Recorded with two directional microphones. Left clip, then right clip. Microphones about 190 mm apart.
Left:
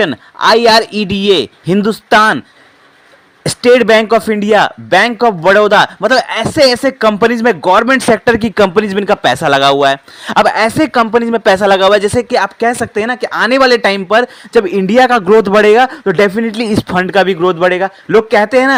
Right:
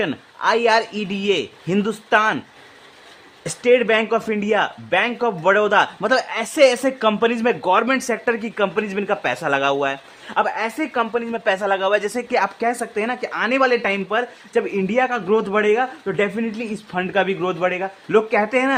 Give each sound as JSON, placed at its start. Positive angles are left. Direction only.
{"t": 0.0, "sound": "speech", "side_deg": 35}
{"t": 3.4, "sound": "speech", "side_deg": 40}